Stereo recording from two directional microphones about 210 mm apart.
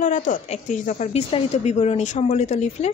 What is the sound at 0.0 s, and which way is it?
A woman's voice, 35° left (ahead or behind).